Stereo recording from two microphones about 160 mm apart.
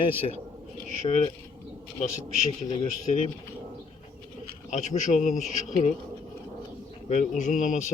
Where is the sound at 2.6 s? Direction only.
40° left (ahead or behind).